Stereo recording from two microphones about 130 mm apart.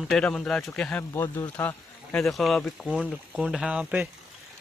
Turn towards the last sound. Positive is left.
turn(degrees=-10)  # may be behind; listen again after turning